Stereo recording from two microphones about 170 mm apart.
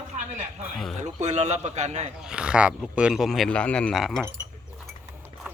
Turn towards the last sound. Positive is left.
turn(degrees=0)  # may be behind; listen again after turning